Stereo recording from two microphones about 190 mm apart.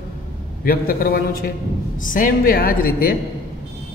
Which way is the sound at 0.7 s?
50° left (ahead or behind).